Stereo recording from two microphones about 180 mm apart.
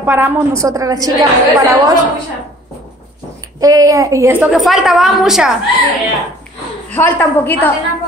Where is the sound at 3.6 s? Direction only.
20° right (ahead or behind).